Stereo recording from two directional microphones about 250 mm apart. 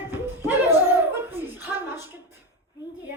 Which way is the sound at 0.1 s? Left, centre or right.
Centre.